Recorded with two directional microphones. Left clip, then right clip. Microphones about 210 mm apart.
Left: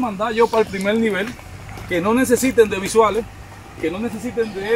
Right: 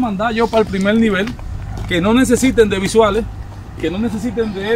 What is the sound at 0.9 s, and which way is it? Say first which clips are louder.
Speech: right 4 dB; 20° right (ahead or behind).